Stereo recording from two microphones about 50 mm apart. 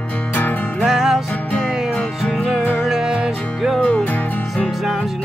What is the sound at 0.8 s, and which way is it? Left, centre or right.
Music, centre.